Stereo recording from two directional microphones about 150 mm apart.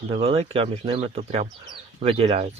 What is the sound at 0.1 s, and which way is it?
Speech, 40° right (ahead or behind).